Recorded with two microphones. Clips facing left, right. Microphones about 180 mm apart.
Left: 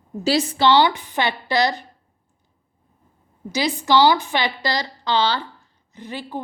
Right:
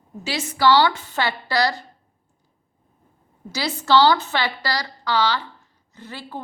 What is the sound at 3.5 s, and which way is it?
A woman's voice, 15° left (ahead or behind).